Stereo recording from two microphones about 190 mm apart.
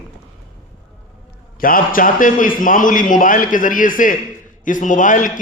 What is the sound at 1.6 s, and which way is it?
A man's voice, 45° left (ahead or behind).